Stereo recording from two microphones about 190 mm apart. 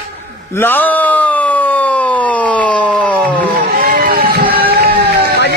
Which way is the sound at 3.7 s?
55° right (ahead or behind).